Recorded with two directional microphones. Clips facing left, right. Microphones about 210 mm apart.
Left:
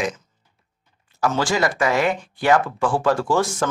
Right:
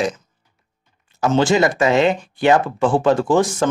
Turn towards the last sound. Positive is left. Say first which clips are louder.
# right 4 dB
turn(degrees=-20)  # may be behind; listen again after turning